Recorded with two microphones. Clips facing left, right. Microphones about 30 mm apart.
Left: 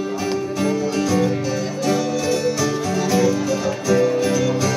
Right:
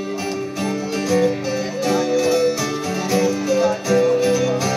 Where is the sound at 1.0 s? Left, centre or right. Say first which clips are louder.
Right 5 dB; centre.